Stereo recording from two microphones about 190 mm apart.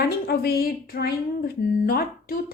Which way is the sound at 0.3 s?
55° left (ahead or behind).